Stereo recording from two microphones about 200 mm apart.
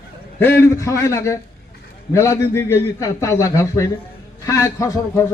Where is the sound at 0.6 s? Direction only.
15° left (ahead or behind).